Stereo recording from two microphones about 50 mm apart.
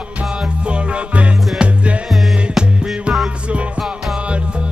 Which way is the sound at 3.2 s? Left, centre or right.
Right.